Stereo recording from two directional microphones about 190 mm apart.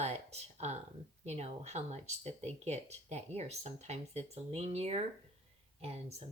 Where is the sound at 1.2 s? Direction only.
35° right (ahead or behind).